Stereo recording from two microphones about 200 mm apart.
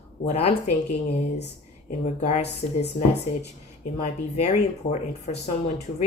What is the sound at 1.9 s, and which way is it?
Speech, 35° left (ahead or behind).